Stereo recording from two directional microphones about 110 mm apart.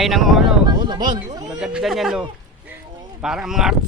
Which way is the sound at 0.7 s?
40° right (ahead or behind).